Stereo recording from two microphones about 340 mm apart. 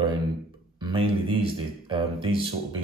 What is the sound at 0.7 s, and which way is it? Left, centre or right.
Speech, centre.